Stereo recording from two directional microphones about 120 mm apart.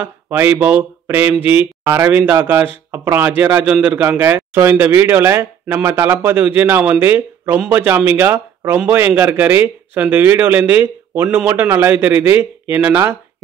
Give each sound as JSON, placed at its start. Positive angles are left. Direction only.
{"t": 0.0, "sound": "speech", "side_deg": -20}